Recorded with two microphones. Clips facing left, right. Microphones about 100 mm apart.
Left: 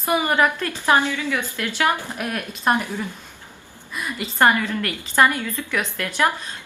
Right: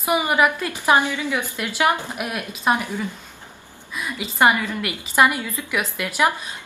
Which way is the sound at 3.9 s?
5° right (ahead or behind).